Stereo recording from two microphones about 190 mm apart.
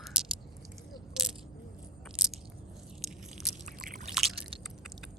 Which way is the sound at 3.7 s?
45° right (ahead or behind).